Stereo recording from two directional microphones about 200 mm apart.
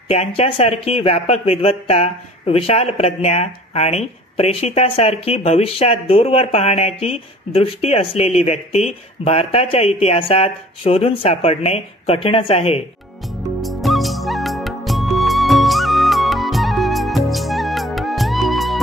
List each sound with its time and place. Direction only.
0.1 s speech: 30° left (ahead or behind)
13.2 s music: centre (ahead or behind)